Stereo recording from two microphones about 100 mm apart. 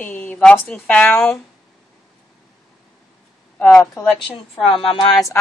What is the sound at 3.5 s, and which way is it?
Speech, 20° left (ahead or behind).